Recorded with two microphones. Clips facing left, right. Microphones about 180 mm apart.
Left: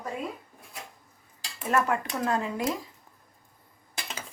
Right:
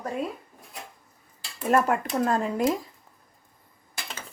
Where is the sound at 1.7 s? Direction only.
40° right (ahead or behind).